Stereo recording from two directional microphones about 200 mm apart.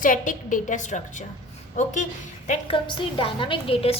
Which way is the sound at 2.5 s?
25° left (ahead or behind).